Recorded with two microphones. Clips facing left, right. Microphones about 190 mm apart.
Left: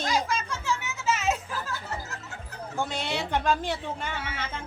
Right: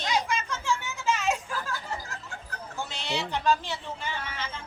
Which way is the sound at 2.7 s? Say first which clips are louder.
Left 3 dB; 55° left (ahead or behind).